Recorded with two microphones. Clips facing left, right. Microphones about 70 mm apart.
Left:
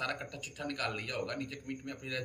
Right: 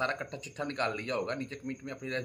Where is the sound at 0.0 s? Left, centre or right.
Right.